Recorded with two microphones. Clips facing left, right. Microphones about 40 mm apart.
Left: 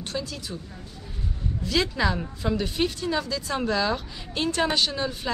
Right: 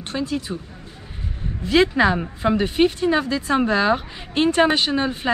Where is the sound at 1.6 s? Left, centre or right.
Right.